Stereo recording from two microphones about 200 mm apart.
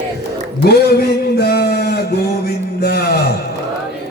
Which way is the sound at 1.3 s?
50° left (ahead or behind).